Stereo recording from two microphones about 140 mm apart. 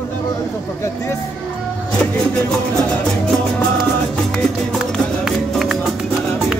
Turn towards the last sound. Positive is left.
turn(degrees=-5)  # may be behind; listen again after turning